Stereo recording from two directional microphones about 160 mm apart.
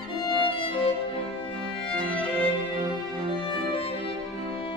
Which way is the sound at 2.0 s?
10° left (ahead or behind).